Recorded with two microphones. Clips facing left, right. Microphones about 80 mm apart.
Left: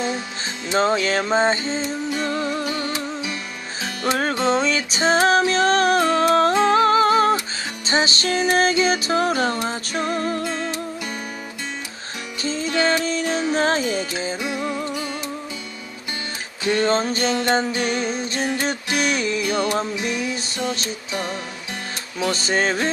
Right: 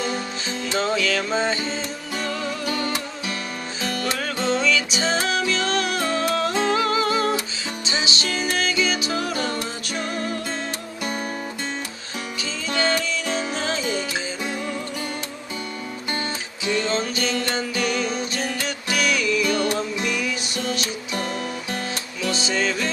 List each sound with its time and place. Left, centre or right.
0.7 s music: left
4.0 s music: left
13.1 s music: left
16.6 s music: left
22.2 s music: left